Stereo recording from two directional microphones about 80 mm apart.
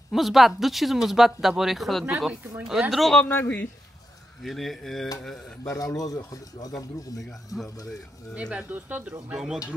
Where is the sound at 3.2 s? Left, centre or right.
Left.